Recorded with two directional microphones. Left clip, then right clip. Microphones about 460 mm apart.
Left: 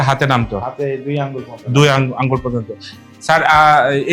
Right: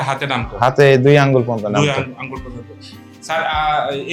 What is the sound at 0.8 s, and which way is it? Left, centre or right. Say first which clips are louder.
Speech: right 13 dB; right.